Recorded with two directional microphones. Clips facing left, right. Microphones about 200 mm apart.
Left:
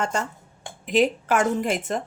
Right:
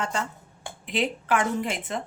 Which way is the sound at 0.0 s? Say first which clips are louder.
Left 3 dB; 45° left (ahead or behind).